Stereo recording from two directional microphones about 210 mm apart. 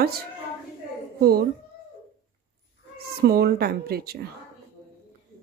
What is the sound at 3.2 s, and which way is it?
Speech, 50° right (ahead or behind).